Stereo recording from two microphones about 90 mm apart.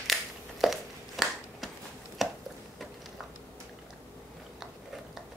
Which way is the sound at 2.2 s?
Centre (ahead or behind).